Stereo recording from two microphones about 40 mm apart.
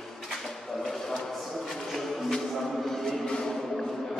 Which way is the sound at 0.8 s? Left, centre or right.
Centre.